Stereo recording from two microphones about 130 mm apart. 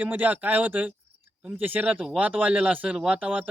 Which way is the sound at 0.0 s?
15° right (ahead or behind).